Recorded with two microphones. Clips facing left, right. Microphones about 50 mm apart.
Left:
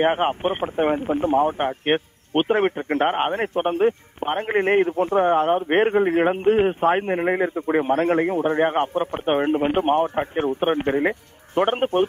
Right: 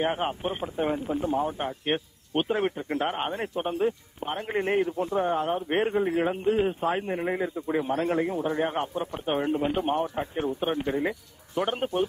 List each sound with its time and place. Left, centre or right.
0.0 s speech: left